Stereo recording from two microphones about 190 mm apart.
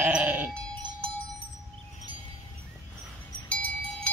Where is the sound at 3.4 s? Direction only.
5° left (ahead or behind).